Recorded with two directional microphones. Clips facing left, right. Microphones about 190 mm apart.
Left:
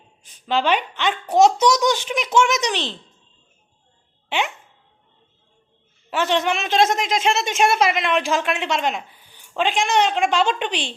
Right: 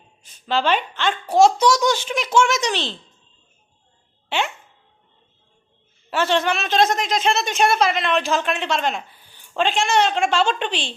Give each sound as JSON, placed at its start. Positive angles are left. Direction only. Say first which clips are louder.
{"t": 0.2, "sound": "a woman's voice", "louder": "even", "side_deg": 15}
{"t": 4.3, "sound": "speech", "louder": "even", "side_deg": 15}
{"t": 6.1, "sound": "a woman's voice", "louder": "even", "side_deg": 15}
{"t": 7.2, "sound": "a woman's voice", "louder": "even", "side_deg": 10}